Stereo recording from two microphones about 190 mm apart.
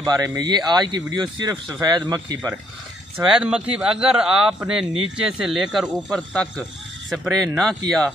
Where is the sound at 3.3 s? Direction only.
5° right (ahead or behind).